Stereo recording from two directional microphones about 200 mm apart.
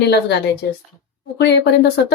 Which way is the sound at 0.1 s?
55° left (ahead or behind).